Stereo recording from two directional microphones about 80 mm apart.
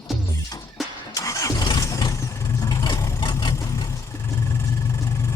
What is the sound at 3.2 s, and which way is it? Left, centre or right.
Vehicle, left.